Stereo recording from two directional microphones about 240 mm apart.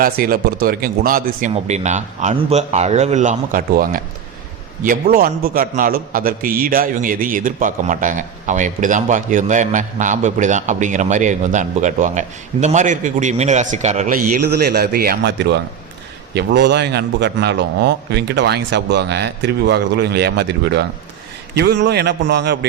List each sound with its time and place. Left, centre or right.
0.0 s a man's voice: right
14.3 s a man's voice: right